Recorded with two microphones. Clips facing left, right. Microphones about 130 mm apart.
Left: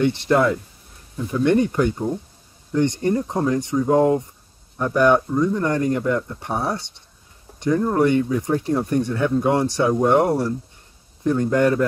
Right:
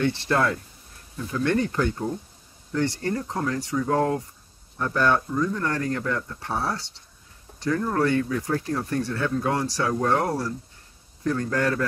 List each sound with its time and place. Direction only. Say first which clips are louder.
0.0 s speech: left 5 dB; 20° left (ahead or behind)